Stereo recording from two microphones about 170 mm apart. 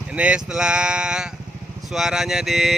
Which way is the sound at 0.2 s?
5° right (ahead or behind).